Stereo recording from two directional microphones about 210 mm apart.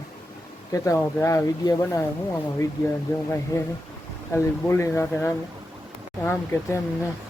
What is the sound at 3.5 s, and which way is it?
Speech, 15° left (ahead or behind).